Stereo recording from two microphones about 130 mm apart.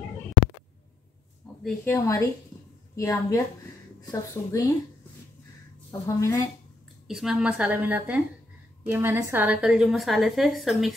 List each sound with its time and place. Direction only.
1.9 s speech: 25° left (ahead or behind)
5.9 s speech: 25° left (ahead or behind)
7.1 s a woman's voice: 5° right (ahead or behind)